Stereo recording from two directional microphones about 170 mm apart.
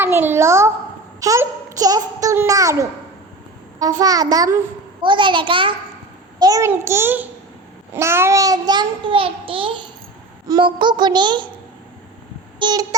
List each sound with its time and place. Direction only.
0.0 s a child's voice: 15° right (ahead or behind)
1.2 s child singing: 20° right (ahead or behind)
6.4 s a child's voice: 20° right (ahead or behind)
7.9 s child singing: 15° right (ahead or behind)
12.5 s a sound: 25° right (ahead or behind)